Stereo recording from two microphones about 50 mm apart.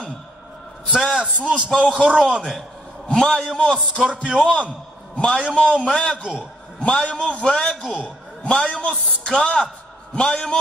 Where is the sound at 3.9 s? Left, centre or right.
Centre.